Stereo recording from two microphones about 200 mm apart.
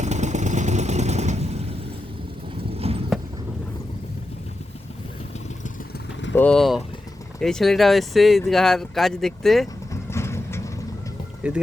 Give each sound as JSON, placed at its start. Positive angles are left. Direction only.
{"t": 0.0, "sound": "vehicle", "side_deg": -35}
{"t": 2.7, "sound": "vehicle", "side_deg": -30}
{"t": 6.3, "sound": "speech", "side_deg": 5}
{"t": 9.9, "sound": "vehicle", "side_deg": 15}